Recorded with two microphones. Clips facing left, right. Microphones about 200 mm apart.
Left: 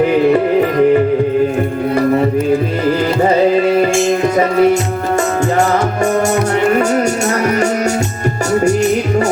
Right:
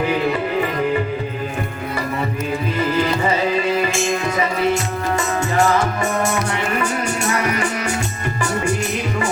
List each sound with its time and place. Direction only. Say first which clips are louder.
3.2 s music: left 8 dB; 45° left (ahead or behind)
6.7 s music: left 9 dB; 45° left (ahead or behind)